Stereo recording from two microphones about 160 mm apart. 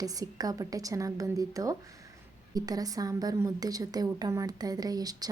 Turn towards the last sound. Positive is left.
turn(degrees=-25)  # may be behind; listen again after turning